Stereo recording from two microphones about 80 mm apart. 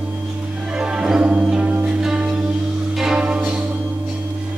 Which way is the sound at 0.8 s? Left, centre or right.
Centre.